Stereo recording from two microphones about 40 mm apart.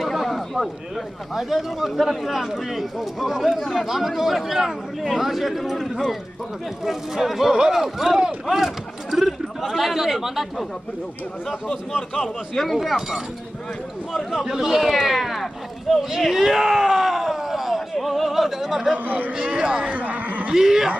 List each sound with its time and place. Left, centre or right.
0.0 s a sound: centre
1.3 s speech: centre
14.4 s speech: centre
16.0 s a sound: centre
17.9 s speech: centre
19.0 s a man's voice: right
19.3 s speech: centre
19.9 s speech: right
20.5 s speech: centre